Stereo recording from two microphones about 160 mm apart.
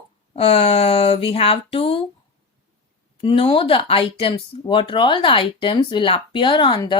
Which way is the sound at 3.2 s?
30° left (ahead or behind).